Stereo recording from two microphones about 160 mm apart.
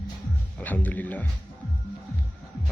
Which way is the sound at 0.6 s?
10° left (ahead or behind).